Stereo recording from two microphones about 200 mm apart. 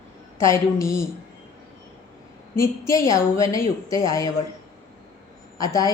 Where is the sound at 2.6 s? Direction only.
15° left (ahead or behind).